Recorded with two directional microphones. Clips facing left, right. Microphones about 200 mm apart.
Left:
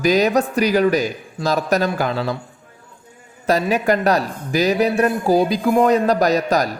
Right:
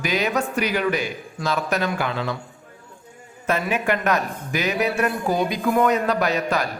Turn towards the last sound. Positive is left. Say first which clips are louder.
# left 5 dB
turn(degrees=40)  # may be behind; listen again after turning